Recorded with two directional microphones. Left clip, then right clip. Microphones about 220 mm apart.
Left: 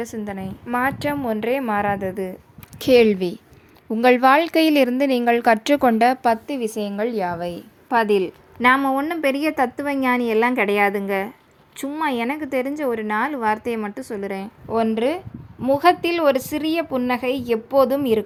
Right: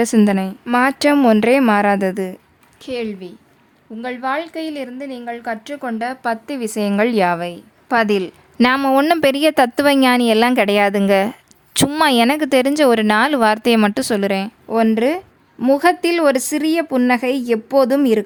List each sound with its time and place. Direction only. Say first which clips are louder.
0.0 s speech: right 14 dB; 50° right (ahead or behind)
0.3 s a woman's voice: right 9 dB; 30° right (ahead or behind)
2.8 s a woman's voice: left 11 dB; 25° left (ahead or behind)
6.5 s a woman's voice: right 4 dB; 15° right (ahead or behind)
8.5 s speech: right 3 dB; 40° right (ahead or behind)
9.6 s a woman's voice: right 10 dB; 55° right (ahead or behind)
10.0 s a woman's voice: right 5 dB; 40° right (ahead or behind)
12.4 s a woman's voice: right 9 dB; 55° right (ahead or behind); by 18.2 s 25° right (ahead or behind)